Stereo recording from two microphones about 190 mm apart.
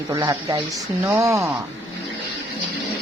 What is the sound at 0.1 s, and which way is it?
A woman's voice, 20° right (ahead or behind).